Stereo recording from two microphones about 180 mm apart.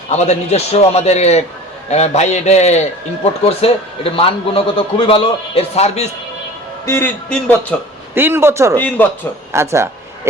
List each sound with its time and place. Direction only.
0.1 s a man's voice: 40° left (ahead or behind)
6.8 s speech: 15° left (ahead or behind)
8.1 s a man's voice: 15° right (ahead or behind)
9.0 s speech: 10° left (ahead or behind)
9.5 s a man's voice: 15° right (ahead or behind)